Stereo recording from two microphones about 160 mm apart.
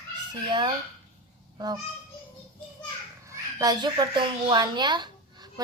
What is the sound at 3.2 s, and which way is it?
Speech, 25° right (ahead or behind).